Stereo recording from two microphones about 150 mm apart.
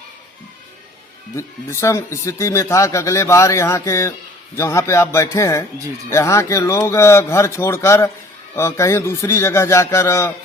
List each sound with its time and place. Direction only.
1.4 s a man's voice: 20° left (ahead or behind)